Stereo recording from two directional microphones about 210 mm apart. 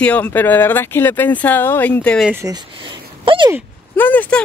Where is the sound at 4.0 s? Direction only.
10° left (ahead or behind).